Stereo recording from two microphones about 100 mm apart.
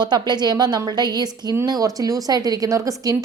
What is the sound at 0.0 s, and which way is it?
A woman's voice, 45° right (ahead or behind).